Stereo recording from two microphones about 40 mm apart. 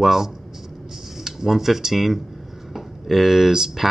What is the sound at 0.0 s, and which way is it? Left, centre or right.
Speech, centre.